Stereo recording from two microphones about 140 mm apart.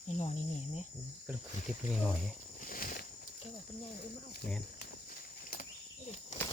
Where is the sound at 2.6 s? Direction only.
85° left.